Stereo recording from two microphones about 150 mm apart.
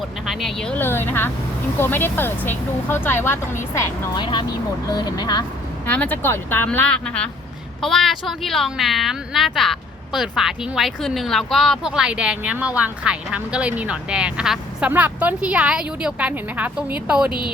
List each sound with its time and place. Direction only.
0.3 s speech: centre (ahead or behind); by 5.5 s 25° left (ahead or behind)
5.8 s a woman's voice: 10° left (ahead or behind); by 17.3 s 5° right (ahead or behind)